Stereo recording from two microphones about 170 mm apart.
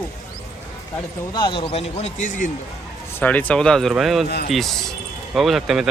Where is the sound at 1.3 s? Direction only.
30° left (ahead or behind); by 2.4 s 45° left (ahead or behind).